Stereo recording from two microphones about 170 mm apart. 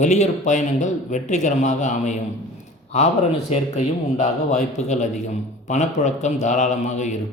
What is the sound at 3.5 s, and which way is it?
A man's voice, 40° left (ahead or behind).